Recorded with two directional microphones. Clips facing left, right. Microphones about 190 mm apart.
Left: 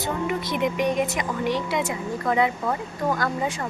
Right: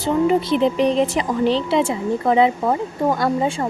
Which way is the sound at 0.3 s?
30° right (ahead or behind).